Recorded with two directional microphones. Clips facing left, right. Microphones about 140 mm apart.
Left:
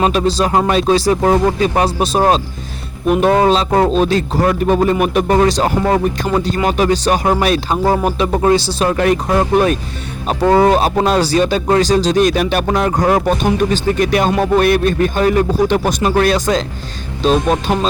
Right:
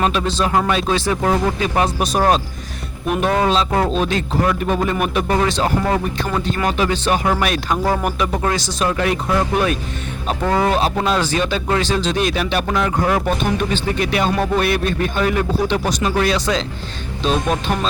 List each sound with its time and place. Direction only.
0.1 s a man's voice: 35° left (ahead or behind)